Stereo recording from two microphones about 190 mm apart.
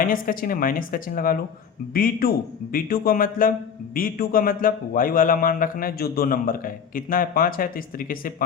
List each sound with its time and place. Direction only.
0.0 s a man's voice: 50° left (ahead or behind)